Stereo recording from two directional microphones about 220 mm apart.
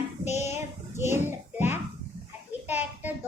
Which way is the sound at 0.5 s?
10° right (ahead or behind).